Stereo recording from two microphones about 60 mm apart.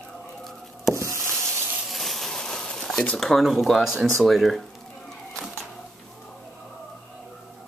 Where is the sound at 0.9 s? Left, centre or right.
Right.